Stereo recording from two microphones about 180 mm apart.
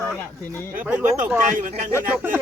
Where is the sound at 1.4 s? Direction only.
50° right (ahead or behind).